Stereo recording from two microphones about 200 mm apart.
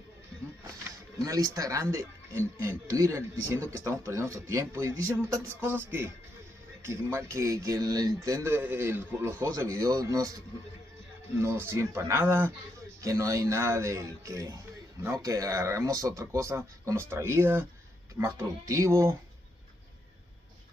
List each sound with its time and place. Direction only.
1.2 s speech: 15° right (ahead or behind)